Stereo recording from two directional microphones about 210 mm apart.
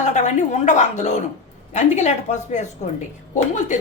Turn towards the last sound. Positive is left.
turn(degrees=35)  # may be behind; listen again after turning